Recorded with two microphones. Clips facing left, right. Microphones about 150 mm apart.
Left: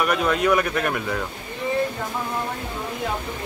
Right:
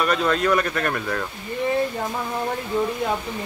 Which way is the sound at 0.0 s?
10° left (ahead or behind).